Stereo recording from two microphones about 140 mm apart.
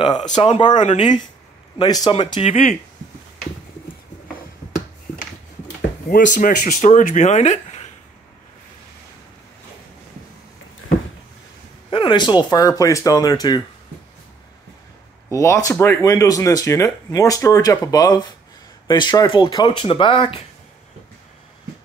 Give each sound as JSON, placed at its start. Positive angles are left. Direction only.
{"t": 0.0, "sound": "speech", "side_deg": 30}
{"t": 2.4, "sound": "speech", "side_deg": 50}
{"t": 6.0, "sound": "speech", "side_deg": 80}
{"t": 11.9, "sound": "speech", "side_deg": 35}
{"t": 15.3, "sound": "speech", "side_deg": 20}